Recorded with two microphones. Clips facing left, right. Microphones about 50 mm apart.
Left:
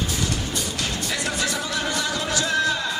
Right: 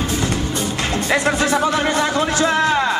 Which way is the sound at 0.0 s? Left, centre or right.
Right.